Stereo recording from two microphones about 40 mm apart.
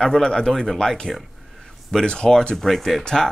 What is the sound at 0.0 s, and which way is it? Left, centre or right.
Speech, centre.